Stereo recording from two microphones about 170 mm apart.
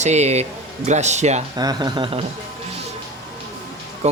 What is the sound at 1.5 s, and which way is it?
Speech, 25° right (ahead or behind).